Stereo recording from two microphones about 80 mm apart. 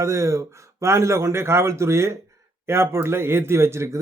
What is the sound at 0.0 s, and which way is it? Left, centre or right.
A man's voice, right.